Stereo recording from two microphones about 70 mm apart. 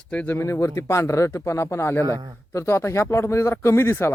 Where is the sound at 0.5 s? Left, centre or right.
Left.